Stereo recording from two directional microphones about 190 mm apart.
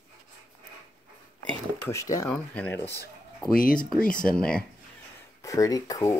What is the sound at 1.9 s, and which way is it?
Speech, 15° left (ahead or behind).